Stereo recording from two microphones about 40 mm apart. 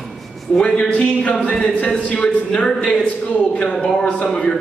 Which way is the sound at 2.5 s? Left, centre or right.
Left.